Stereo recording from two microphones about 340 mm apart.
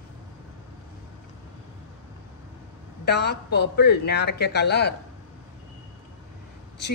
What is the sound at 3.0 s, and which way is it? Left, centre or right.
A man's voice, left.